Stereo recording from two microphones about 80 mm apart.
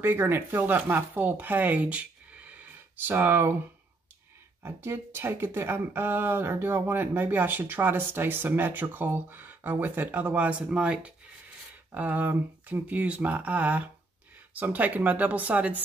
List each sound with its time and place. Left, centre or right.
0.0 s speech: right
4.6 s speech: right